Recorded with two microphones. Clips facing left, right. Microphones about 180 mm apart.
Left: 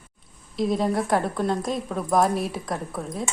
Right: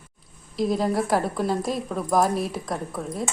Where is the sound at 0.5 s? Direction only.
Centre (ahead or behind).